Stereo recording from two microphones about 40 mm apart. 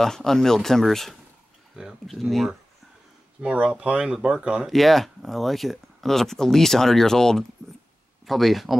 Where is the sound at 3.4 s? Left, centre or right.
Right.